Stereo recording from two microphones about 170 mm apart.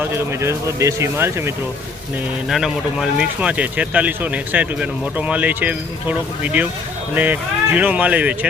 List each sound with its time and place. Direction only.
0.0 s speech: 15° right (ahead or behind)
2.5 s speech: centre (ahead or behind)